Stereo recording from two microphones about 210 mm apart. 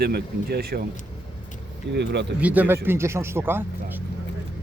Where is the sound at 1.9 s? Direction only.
55° right (ahead or behind).